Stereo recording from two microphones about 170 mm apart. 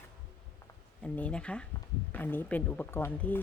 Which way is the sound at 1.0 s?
5° left (ahead or behind).